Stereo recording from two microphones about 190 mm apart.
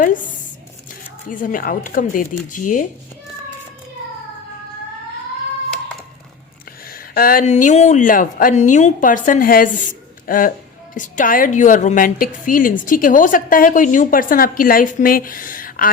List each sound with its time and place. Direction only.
1.3 s a woman's voice: 45° left (ahead or behind)
6.9 s a woman's voice: 50° left (ahead or behind)